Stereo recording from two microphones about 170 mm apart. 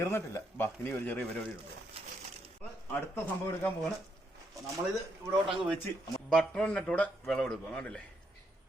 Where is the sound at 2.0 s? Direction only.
35° right (ahead or behind).